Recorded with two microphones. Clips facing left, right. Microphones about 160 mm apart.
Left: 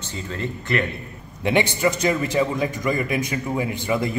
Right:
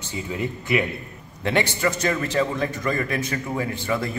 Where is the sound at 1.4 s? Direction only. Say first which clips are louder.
Left 3 dB; 15° left (ahead or behind).